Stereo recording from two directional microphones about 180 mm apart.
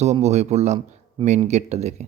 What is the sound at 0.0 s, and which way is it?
A man's voice, 35° right (ahead or behind).